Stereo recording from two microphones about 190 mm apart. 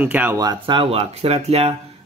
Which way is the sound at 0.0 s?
10° right (ahead or behind).